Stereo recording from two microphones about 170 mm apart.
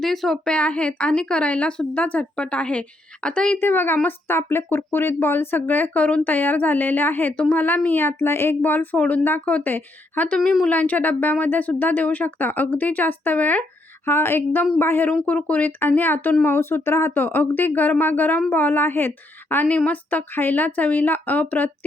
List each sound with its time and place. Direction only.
0.0 s a woman's voice: centre (ahead or behind)